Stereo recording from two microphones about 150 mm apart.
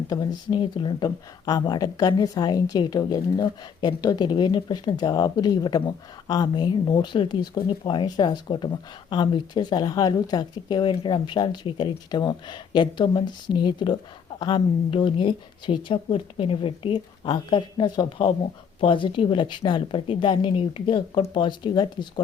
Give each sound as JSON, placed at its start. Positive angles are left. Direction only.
{"t": 0.1, "sound": "speech", "side_deg": 30}